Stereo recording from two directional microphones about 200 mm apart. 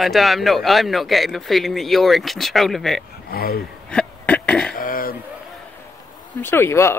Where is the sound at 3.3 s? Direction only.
50° left (ahead or behind).